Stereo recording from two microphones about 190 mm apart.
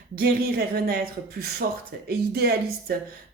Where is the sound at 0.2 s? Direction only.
55° right (ahead or behind).